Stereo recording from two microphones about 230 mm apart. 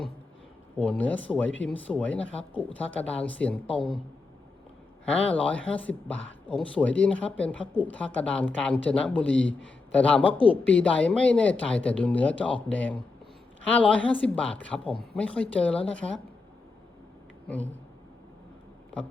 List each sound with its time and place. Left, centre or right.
0.8 s speech: centre
5.0 s speech: centre
10.3 s speech: left
10.7 s speech: centre